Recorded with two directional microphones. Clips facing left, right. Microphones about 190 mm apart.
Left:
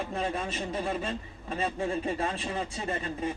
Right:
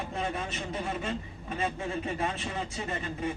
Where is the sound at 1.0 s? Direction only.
30° left (ahead or behind).